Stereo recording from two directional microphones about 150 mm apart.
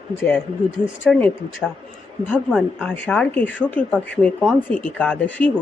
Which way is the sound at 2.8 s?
10° left (ahead or behind).